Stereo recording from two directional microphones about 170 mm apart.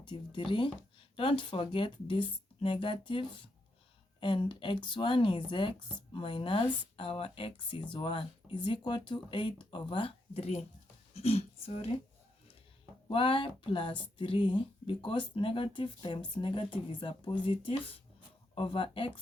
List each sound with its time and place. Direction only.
0.0 s speech: 30° left (ahead or behind)
13.1 s speech: 30° left (ahead or behind)